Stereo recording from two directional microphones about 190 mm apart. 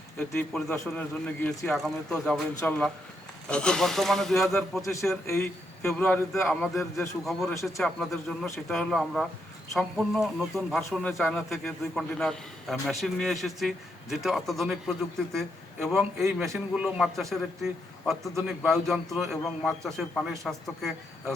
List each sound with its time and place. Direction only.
0.2 s a man's voice: 10° left (ahead or behind)
4.8 s a man's voice: 15° left (ahead or behind)